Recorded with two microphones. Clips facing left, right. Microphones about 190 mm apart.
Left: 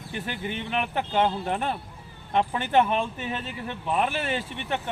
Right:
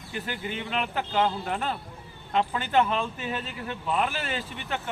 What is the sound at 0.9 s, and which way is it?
Speech, 25° left (ahead or behind).